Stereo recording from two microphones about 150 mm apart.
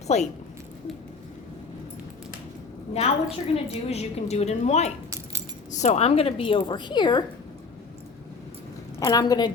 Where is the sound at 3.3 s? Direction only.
40° left (ahead or behind).